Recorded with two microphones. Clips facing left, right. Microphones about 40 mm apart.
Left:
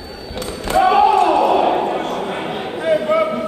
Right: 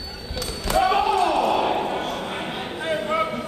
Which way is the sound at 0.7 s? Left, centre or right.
Left.